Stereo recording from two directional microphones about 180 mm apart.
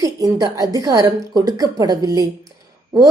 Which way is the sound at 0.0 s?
20° right (ahead or behind).